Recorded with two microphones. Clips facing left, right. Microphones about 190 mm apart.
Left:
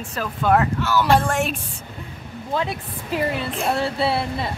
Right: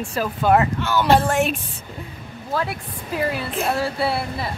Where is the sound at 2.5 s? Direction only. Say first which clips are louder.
Even; 20° left (ahead or behind).